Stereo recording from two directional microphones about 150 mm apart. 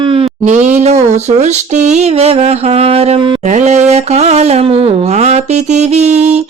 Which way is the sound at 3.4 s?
50° right (ahead or behind).